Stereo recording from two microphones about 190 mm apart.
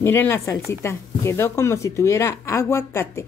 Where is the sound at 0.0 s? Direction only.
15° left (ahead or behind).